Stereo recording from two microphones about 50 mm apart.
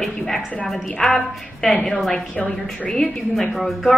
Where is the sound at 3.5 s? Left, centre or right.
Centre.